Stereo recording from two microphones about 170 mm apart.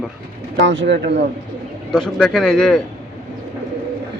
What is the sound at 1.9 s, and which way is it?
Speech, 5° left (ahead or behind).